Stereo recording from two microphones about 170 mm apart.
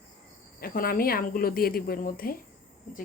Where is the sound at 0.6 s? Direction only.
60° left (ahead or behind).